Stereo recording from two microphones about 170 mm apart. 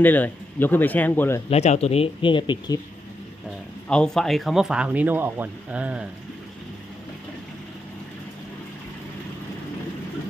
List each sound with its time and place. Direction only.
0.0 s speech: 10° left (ahead or behind)
1.5 s speech: 40° left (ahead or behind)
3.9 s speech: 5° left (ahead or behind)